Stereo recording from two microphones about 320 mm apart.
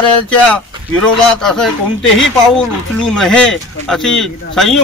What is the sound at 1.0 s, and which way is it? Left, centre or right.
Speech, centre.